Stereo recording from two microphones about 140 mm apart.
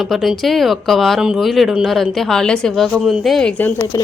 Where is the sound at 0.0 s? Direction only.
Centre (ahead or behind).